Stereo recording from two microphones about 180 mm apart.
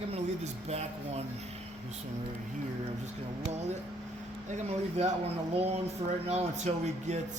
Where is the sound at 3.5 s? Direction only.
40° right (ahead or behind).